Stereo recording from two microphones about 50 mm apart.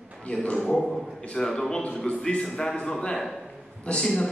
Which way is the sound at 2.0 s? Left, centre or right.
Left.